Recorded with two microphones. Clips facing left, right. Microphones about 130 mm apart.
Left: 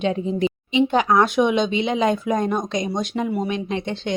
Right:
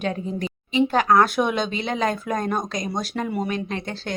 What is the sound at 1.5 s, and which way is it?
Speech, 45° right (ahead or behind).